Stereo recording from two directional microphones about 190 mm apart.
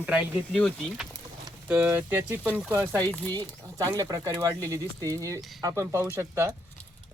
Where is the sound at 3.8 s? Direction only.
15° right (ahead or behind).